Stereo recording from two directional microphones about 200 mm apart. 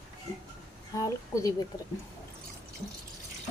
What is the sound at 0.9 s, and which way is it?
Speech, 15° left (ahead or behind).